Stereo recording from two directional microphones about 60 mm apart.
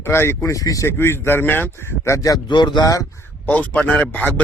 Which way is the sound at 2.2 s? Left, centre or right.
Left.